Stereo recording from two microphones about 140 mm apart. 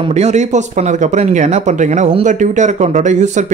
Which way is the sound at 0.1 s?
55° right (ahead or behind).